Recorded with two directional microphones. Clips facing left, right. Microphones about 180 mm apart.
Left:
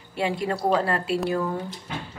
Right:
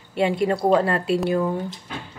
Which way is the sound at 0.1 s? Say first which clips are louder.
Right 5 dB; 25° right (ahead or behind).